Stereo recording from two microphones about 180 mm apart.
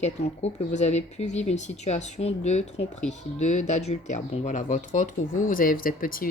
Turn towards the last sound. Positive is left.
turn(degrees=50)  # may be behind; listen again after turning